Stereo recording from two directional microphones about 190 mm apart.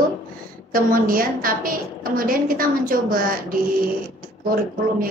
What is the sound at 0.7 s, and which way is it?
A woman's voice, 50° right (ahead or behind).